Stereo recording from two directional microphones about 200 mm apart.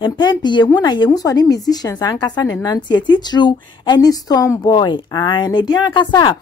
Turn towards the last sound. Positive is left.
turn(degrees=20)  # may be behind; listen again after turning